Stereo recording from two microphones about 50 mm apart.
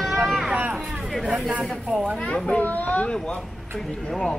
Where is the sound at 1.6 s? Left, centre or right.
Centre.